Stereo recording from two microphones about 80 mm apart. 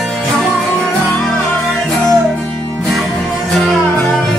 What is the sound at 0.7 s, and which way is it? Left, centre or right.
Music, centre.